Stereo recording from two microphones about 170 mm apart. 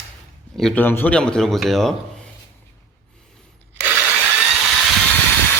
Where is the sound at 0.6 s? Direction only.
5° left (ahead or behind).